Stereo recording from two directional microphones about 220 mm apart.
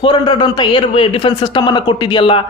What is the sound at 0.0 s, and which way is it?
A man's voice, 20° left (ahead or behind).